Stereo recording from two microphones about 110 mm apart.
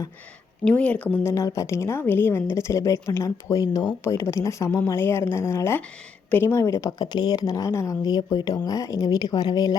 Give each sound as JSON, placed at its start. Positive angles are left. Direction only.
{"t": 0.6, "sound": "a woman's voice", "side_deg": 10}
{"t": 7.0, "sound": "speech", "side_deg": 40}
{"t": 8.0, "sound": "speech", "side_deg": 40}